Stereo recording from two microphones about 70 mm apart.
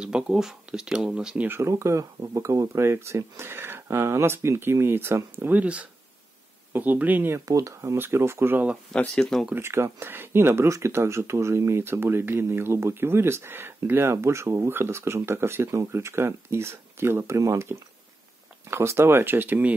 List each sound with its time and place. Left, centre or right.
0.0 s speech: centre
1.6 s speech: right
5.5 s speech: centre
7.3 s speech: right
8.0 s speech: right
8.9 s speech: centre
9.6 s speech: right